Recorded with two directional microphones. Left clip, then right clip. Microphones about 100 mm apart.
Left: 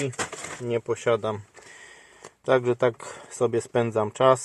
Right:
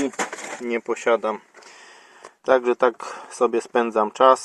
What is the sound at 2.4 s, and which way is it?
Speech, centre (ahead or behind).